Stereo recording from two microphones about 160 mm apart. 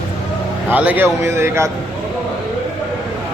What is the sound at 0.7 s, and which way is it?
A man's voice, 10° right (ahead or behind).